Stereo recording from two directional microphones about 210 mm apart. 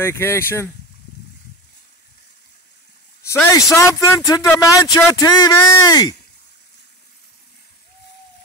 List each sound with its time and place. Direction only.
0.0 s speech: 10° left (ahead or behind)
3.3 s speech: 15° left (ahead or behind)